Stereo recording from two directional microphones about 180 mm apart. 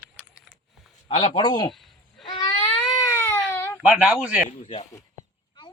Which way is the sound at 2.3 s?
20° left (ahead or behind).